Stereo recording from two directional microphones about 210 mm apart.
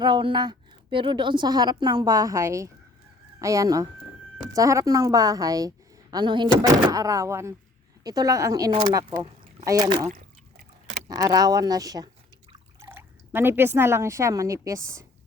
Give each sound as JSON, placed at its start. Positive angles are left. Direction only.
{"t": 0.0, "sound": "a woman's voice", "side_deg": -20}
{"t": 11.1, "sound": "a woman's voice", "side_deg": -15}